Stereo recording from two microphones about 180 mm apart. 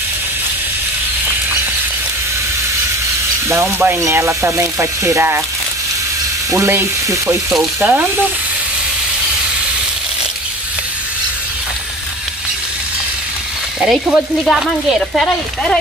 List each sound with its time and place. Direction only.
3.4 s sizzle: 15° right (ahead or behind)
6.5 s sizzle: 15° right (ahead or behind)
13.7 s speech: centre (ahead or behind)